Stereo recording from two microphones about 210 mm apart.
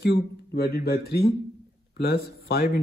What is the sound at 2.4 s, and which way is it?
Speech, 45° left (ahead or behind).